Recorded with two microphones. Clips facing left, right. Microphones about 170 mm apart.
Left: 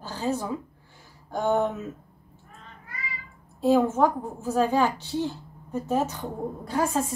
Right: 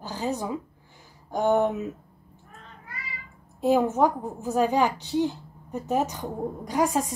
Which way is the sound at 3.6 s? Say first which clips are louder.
Left 1 dB; 15° right (ahead or behind).